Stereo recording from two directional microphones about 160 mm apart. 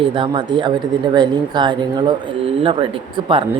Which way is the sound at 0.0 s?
30° right (ahead or behind).